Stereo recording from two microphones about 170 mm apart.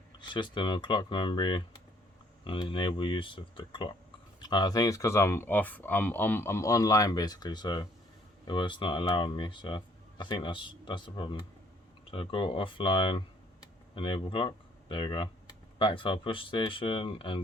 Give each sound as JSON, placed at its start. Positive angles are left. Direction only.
{"t": 0.2, "sound": "speech", "side_deg": 30}